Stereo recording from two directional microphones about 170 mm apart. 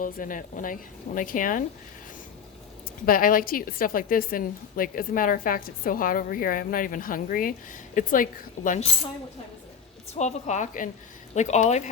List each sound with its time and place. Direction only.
0.0 s a woman's voice: 50° left (ahead or behind)
3.1 s a woman's voice: 55° left (ahead or behind)
10.2 s a woman's voice: 45° left (ahead or behind)